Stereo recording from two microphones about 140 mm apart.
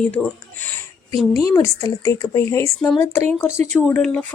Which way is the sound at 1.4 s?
20° left (ahead or behind).